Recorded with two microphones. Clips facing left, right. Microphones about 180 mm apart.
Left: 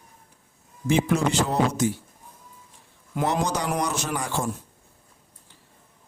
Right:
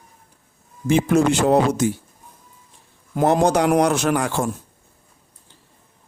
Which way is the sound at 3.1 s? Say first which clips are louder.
Right 8 dB; 50° right (ahead or behind).